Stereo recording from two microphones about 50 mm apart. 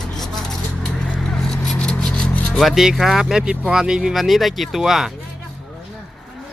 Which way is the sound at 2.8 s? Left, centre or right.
Centre.